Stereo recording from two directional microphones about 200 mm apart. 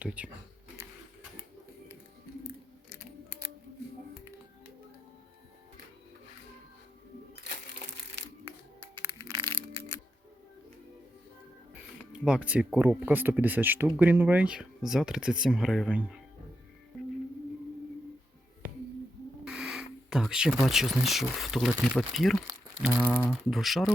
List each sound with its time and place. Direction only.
0.0 s speech: 5° right (ahead or behind)
9.0 s music: 20° right (ahead or behind)
12.2 s speech: 5° right (ahead or behind)
19.5 s speech: centre (ahead or behind)